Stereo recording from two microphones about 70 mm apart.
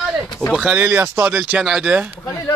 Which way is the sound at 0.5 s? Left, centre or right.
Centre.